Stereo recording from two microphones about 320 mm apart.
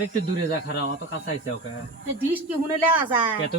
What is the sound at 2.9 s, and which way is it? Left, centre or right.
Speech, centre.